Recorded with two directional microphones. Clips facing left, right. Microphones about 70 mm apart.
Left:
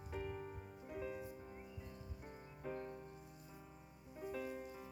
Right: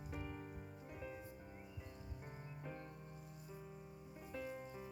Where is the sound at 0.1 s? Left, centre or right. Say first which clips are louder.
Left 4 dB; centre.